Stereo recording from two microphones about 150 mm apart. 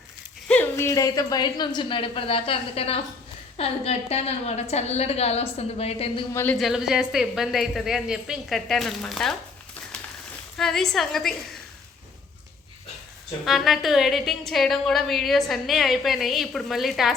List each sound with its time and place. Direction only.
0.4 s a woman's voice: 10° left (ahead or behind); by 6.2 s 40° left (ahead or behind)
6.3 s a woman's voice: 10° left (ahead or behind)
6.6 s a woman's voice: centre (ahead or behind)
10.6 s a woman's voice: 5° left (ahead or behind)
13.4 s a woman's voice: centre (ahead or behind)